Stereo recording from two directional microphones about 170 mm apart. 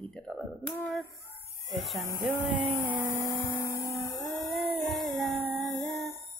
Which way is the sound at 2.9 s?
15° right (ahead or behind).